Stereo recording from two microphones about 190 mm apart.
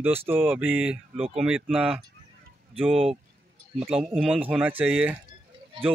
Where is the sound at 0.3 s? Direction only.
10° right (ahead or behind).